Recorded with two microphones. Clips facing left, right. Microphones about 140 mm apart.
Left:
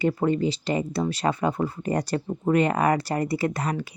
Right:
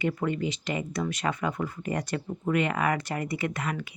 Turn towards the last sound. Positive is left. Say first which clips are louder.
# left 5 dB
turn(degrees=35)  # may be behind; listen again after turning